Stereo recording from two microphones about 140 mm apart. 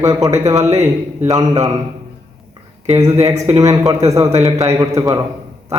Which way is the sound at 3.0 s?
50° right (ahead or behind).